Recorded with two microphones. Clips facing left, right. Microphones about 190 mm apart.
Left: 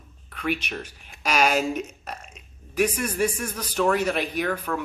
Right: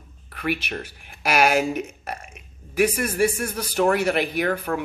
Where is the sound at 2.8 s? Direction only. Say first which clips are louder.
Right 3 dB; 60° right (ahead or behind).